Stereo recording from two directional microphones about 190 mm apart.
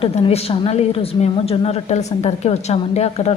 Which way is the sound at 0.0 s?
30° left (ahead or behind).